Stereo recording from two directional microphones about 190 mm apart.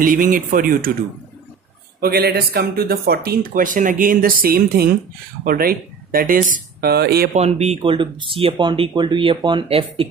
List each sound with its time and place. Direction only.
0.0 s speech: 45° right (ahead or behind)
2.0 s speech: 55° right (ahead or behind)
7.3 s speech: 35° right (ahead or behind)